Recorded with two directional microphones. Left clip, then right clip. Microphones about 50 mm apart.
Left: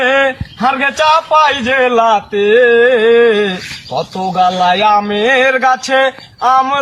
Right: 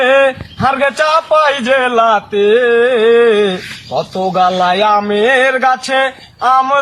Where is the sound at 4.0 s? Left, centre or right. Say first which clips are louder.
Right 1 dB; right.